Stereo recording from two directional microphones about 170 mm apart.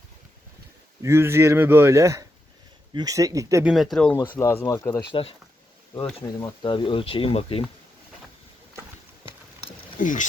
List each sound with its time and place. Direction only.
1.0 s speech: 15° right (ahead or behind)
3.6 s speech: 5° right (ahead or behind)
4.3 s speech: 15° left (ahead or behind)
6.6 s speech: 30° left (ahead or behind)
9.2 s a sound: 35° left (ahead or behind)
10.0 s speech: 50° left (ahead or behind)